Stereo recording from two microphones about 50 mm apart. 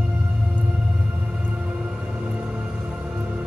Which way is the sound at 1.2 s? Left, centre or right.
Right.